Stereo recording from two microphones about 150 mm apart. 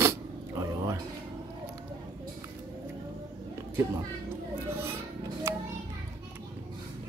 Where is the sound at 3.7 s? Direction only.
15° right (ahead or behind).